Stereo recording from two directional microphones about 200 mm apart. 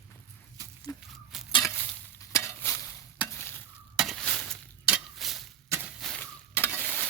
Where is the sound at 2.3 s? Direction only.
10° left (ahead or behind).